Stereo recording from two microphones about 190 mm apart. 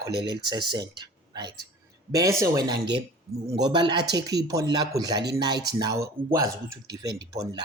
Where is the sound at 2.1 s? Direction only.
15° right (ahead or behind).